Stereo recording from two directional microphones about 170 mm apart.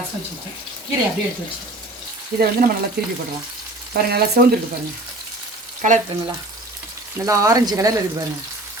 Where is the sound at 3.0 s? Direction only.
70° right (ahead or behind).